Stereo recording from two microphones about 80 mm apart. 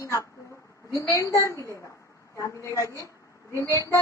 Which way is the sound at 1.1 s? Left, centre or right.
Left.